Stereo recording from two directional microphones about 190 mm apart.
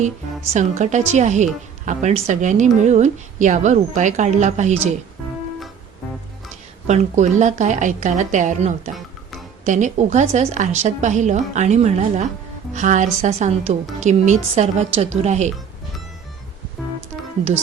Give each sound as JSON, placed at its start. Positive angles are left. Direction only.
{"t": 0.8, "sound": "a woman's voice", "side_deg": -40}
{"t": 6.8, "sound": "a woman's voice", "side_deg": -35}